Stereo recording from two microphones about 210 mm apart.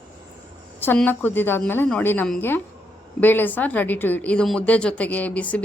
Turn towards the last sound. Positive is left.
turn(degrees=5)  # may be behind; listen again after turning